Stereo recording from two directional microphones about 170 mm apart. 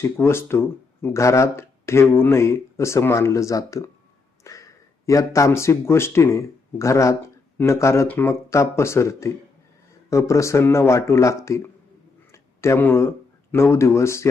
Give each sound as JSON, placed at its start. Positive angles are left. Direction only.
{"t": 0.0, "sound": "speech", "side_deg": 15}